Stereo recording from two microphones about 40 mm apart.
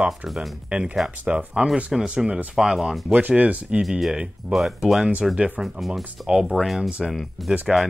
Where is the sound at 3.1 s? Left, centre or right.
Right.